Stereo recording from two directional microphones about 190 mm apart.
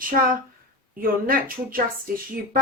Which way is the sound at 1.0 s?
50° right (ahead or behind).